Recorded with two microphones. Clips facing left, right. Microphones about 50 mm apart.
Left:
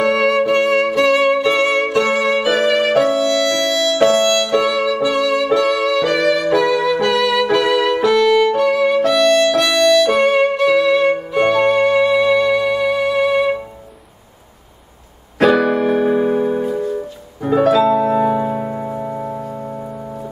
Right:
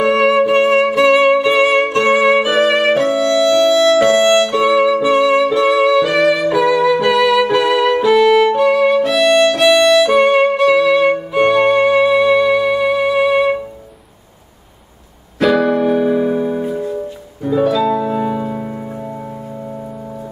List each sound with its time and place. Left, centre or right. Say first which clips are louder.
0.0 s music: right 2 dB; centre
1.9 s music: right 4 dB; right
4.1 s violin: right 3 dB; centre
4.6 s music: right 5 dB; right
4.9 s music: right 4 dB; right
6.5 s music: right 2 dB; centre
7.7 s violin: right 2 dB; centre
11.3 s music: right 2 dB; centre
15.4 s keyboard: even; centre
15.8 s music: right 1 dB; left
17.4 s music: left 2 dB; left